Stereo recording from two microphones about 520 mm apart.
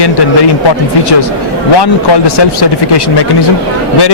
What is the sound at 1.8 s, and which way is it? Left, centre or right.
Speech, left.